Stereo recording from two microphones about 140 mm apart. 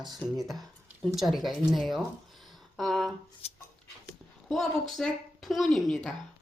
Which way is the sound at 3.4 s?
45° left (ahead or behind).